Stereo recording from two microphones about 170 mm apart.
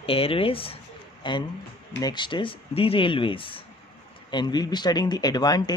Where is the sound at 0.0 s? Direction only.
35° left (ahead or behind).